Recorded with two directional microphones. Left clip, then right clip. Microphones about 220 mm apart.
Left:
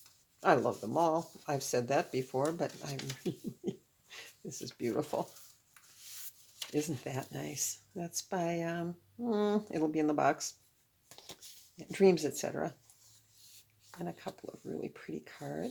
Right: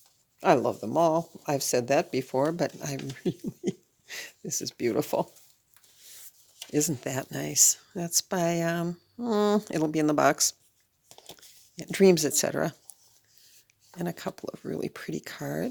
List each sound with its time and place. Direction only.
0.3 s speech: 45° right (ahead or behind)
6.7 s speech: 45° right (ahead or behind)
11.8 s speech: 45° right (ahead or behind)
14.0 s speech: 45° right (ahead or behind)